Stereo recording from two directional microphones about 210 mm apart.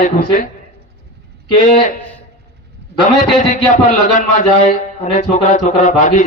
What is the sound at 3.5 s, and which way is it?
A man's voice, 35° left (ahead or behind).